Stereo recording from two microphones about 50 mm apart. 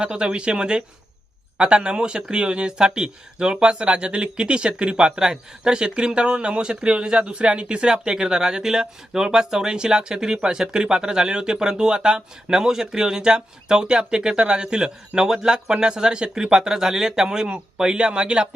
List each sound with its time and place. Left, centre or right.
0.0 s speech: right